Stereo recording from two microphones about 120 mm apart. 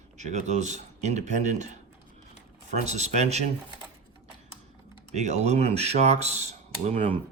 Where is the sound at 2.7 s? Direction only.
70° right (ahead or behind).